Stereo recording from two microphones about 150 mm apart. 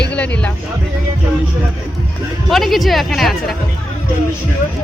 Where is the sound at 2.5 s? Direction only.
Centre (ahead or behind).